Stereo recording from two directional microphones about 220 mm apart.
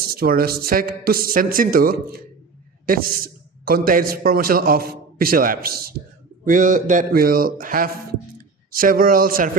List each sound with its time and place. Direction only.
0.0 s a woman's voice: 45° right (ahead or behind)